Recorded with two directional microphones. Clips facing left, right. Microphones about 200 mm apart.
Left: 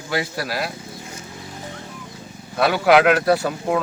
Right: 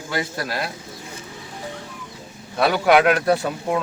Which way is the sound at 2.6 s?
Centre (ahead or behind).